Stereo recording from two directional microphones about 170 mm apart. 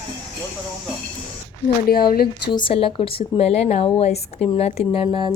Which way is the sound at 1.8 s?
55° left (ahead or behind).